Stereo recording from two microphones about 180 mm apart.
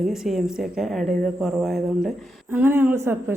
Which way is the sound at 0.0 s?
Centre (ahead or behind).